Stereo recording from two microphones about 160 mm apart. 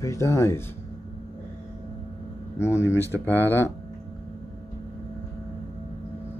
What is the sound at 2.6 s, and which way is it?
Speech, 15° left (ahead or behind).